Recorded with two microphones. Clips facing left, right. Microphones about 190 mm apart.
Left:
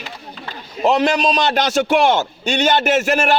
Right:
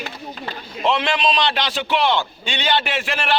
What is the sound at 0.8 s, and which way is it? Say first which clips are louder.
A man's voice: left 4 dB; 45° left (ahead or behind).